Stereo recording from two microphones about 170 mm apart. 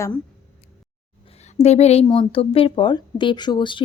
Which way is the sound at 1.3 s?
40° left (ahead or behind).